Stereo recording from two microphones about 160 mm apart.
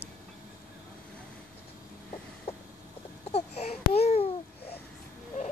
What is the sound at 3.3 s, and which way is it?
Babbling, 40° left (ahead or behind).